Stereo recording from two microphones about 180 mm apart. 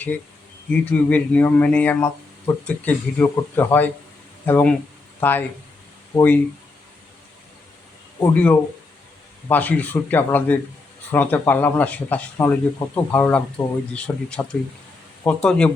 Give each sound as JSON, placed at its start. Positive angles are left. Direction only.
{"t": 0.7, "sound": "speech", "side_deg": 10}
{"t": 8.2, "sound": "speech", "side_deg": 10}